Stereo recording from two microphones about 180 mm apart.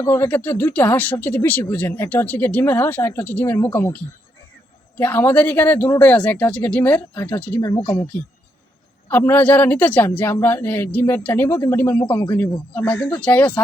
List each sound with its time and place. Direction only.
0.0 s speech: 15° left (ahead or behind)
7.6 s speech: 20° left (ahead or behind)
9.0 s speech: 10° left (ahead or behind)